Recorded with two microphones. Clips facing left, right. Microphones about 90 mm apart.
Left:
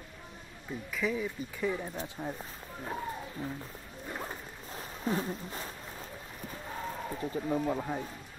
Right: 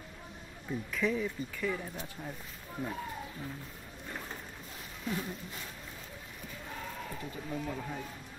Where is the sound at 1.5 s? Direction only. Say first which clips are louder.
Left 2 dB; 20° left (ahead or behind).